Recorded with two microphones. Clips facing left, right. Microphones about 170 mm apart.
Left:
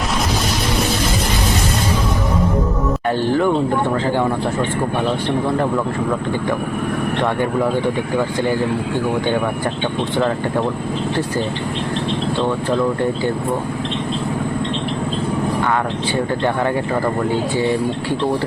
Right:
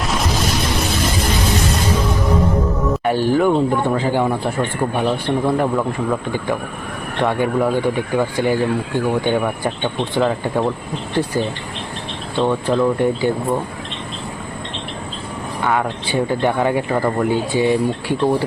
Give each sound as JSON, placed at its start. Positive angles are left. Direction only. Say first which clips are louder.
{"t": 3.1, "sound": "speech", "louder": "right 1 dB", "side_deg": -15}
{"t": 12.4, "sound": "speech", "louder": "right 4 dB", "side_deg": -15}
{"t": 16.4, "sound": "speech", "louder": "right 1 dB", "side_deg": -15}